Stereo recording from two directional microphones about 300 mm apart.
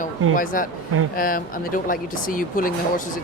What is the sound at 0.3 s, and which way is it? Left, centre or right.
Speech, left.